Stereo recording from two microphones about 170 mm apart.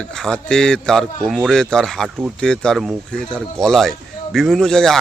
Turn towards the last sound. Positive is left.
turn(degrees=5)  # may be behind; listen again after turning